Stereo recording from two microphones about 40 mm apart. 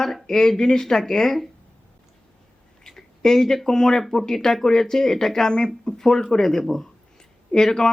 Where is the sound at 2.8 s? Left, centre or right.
Centre.